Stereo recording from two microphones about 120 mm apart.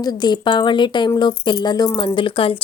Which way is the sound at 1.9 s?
45° left (ahead or behind).